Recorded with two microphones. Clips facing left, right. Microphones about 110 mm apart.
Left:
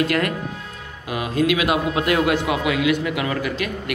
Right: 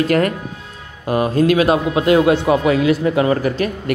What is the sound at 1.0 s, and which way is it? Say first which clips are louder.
Speech: right 6 dB; 40° right (ahead or behind).